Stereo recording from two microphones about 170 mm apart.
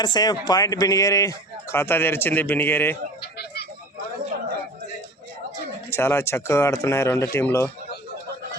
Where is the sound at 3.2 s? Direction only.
70° left (ahead or behind).